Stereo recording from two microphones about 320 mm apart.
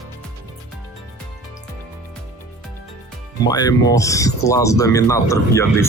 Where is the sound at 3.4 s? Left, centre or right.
Centre.